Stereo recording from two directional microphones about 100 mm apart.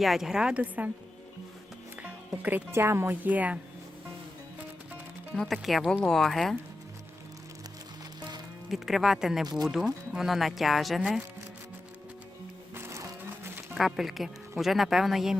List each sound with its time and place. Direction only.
0.0 s a woman's voice: 5° right (ahead or behind)
2.0 s speech: 15° right (ahead or behind)
5.3 s speech: centre (ahead or behind)
8.7 s speech: 5° right (ahead or behind)
12.7 s music: 25° right (ahead or behind)
13.7 s speech: centre (ahead or behind)